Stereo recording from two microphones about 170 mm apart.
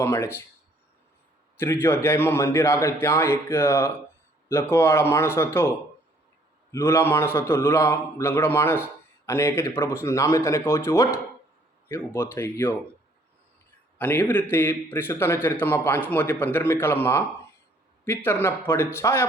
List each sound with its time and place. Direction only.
0.0 s a man's voice: 15° left (ahead or behind)
1.5 s a man's voice: 15° left (ahead or behind)
14.0 s a man's voice: 10° left (ahead or behind)